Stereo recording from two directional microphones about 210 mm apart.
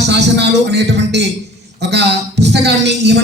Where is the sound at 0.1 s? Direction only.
55° right (ahead or behind).